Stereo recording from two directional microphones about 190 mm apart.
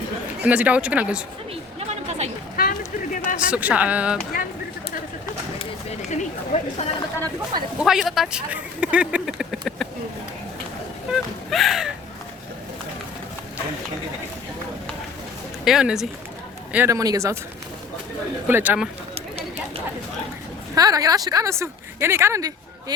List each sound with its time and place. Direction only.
0.4 s speech: 5° right (ahead or behind)
1.9 s a sound: 35° right (ahead or behind)
2.6 s speech: 50° left (ahead or behind)
3.5 s speech: 5° right (ahead or behind)
6.1 s speech: 35° left (ahead or behind)
7.8 s speech: centre (ahead or behind)
11.1 s speech: centre (ahead or behind)
15.6 s speech: 5° right (ahead or behind)
16.7 s speech: 15° right (ahead or behind)
18.4 s speech: 10° right (ahead or behind)
20.7 s a woman's voice: 20° right (ahead or behind)